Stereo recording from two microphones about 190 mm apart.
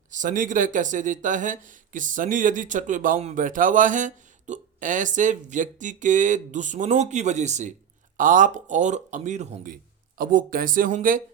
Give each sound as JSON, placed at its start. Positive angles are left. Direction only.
{"t": 0.1, "sound": "speech", "side_deg": -45}